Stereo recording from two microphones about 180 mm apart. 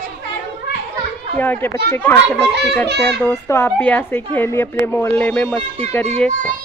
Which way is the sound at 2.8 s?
70° right (ahead or behind).